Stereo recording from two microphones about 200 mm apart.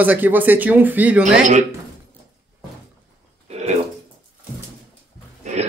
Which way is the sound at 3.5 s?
35° right (ahead or behind).